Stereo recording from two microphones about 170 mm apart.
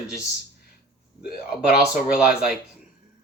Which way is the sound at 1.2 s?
65° left (ahead or behind).